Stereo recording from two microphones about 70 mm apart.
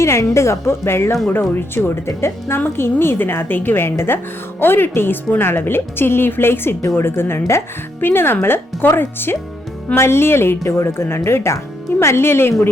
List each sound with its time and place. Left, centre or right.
0.0 s a woman's voice: left